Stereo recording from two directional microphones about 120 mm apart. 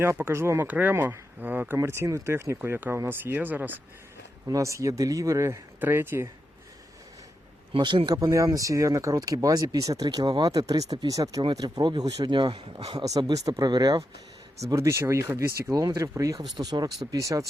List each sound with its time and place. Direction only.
0.0 s speech: 20° right (ahead or behind)
4.4 s speech: 25° right (ahead or behind)
7.7 s speech: 45° right (ahead or behind)
13.1 s speech: 30° right (ahead or behind)
14.7 s speech: 25° right (ahead or behind)